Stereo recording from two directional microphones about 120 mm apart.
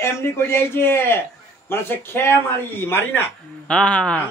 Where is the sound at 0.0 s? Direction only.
20° left (ahead or behind).